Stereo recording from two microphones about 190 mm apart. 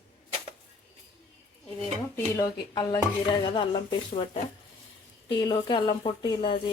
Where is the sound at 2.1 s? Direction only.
20° left (ahead or behind).